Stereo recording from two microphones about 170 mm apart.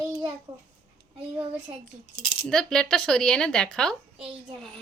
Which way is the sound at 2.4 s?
5° left (ahead or behind).